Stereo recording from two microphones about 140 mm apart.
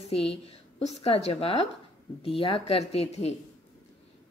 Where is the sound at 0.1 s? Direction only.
45° left (ahead or behind).